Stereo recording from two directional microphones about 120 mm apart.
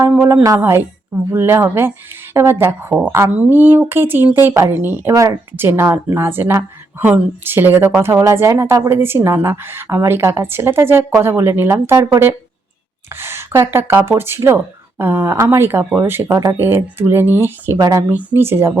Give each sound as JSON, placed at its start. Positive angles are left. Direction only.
{"t": 0.0, "sound": "a woman's voice", "side_deg": -20}
{"t": 13.1, "sound": "speech", "side_deg": -20}
{"t": 17.7, "sound": "speech", "side_deg": -35}
{"t": 18.1, "sound": "speech", "side_deg": -15}